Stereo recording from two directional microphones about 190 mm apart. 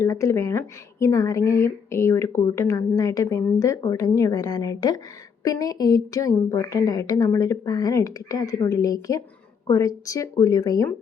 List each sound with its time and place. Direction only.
0.0 s a woman's voice: 15° left (ahead or behind)